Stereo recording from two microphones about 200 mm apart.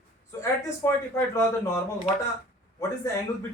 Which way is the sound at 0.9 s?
15° left (ahead or behind).